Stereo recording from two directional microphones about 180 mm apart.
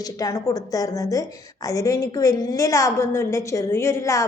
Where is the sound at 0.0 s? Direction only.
20° left (ahead or behind).